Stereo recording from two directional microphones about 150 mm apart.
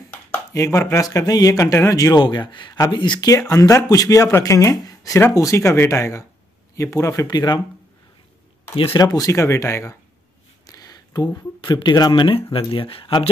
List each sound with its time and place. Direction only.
0.1 s speech: 15° left (ahead or behind)
8.7 s speech: 30° left (ahead or behind)